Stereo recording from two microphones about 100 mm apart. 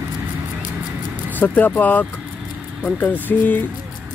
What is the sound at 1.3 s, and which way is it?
Speech, 15° left (ahead or behind).